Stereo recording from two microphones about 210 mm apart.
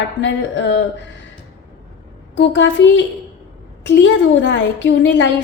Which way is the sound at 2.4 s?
60° left (ahead or behind).